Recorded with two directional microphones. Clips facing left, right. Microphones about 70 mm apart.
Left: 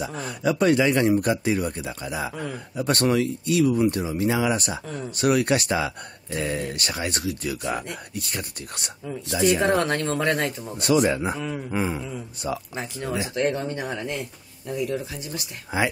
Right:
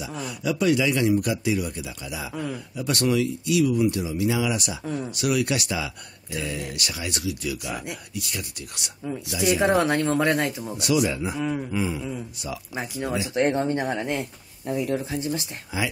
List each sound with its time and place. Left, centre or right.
0.0 s speech: left
4.8 s speech: centre
5.1 s speech: left
9.6 s speech: centre
10.8 s speech: left
11.3 s speech: centre
11.7 s speech: left
12.7 s speech: centre
13.3 s speech: right
15.7 s speech: left